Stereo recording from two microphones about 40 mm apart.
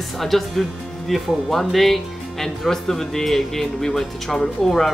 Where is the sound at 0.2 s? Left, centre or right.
Centre.